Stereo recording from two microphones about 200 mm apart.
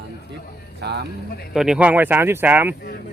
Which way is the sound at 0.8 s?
55° right (ahead or behind).